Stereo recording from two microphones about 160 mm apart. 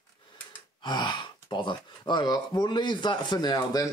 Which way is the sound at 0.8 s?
30° left (ahead or behind).